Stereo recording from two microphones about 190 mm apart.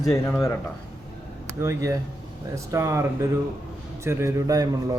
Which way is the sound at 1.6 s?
15° right (ahead or behind).